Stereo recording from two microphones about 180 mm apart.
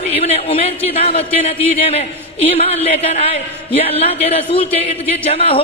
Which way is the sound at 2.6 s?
35° left (ahead or behind).